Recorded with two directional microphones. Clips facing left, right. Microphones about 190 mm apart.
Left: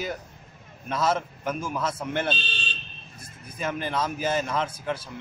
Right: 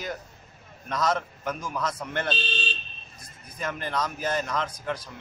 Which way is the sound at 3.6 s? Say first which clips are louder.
Left 2 dB; 5° left (ahead or behind).